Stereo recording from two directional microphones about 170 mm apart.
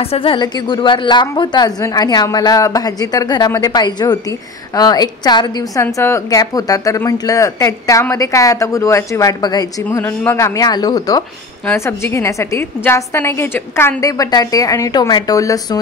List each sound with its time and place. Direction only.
0.0 s a woman's voice: 35° left (ahead or behind)